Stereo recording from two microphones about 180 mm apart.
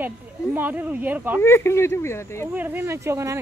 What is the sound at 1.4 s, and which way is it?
Speech, 15° left (ahead or behind).